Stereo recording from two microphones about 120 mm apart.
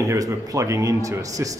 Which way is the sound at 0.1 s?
30° right (ahead or behind).